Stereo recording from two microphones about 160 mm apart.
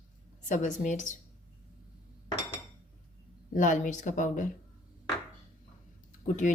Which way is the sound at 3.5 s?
55° left (ahead or behind).